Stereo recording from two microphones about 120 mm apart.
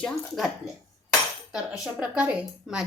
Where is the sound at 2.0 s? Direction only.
10° right (ahead or behind).